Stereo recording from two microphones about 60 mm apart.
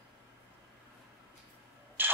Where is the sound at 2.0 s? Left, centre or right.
Right.